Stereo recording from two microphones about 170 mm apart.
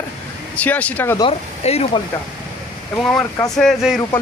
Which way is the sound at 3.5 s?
Centre (ahead or behind).